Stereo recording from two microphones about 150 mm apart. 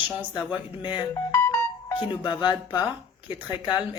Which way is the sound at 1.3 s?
15° left (ahead or behind).